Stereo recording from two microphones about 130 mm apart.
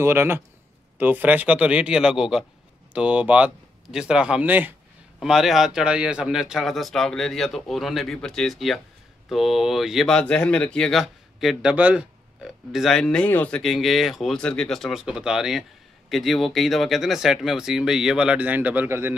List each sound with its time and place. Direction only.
0.0 s speech: 20° right (ahead or behind)
5.2 s speech: 5° right (ahead or behind)
13.6 s speech: centre (ahead or behind); by 19.1 s 15° right (ahead or behind)